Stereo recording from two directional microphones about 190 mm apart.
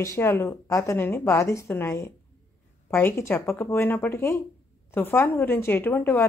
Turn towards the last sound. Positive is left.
turn(degrees=10)  # may be behind; listen again after turning